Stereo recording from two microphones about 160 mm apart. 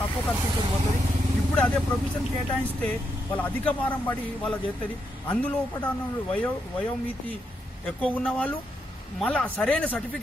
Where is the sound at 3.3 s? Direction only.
10° left (ahead or behind).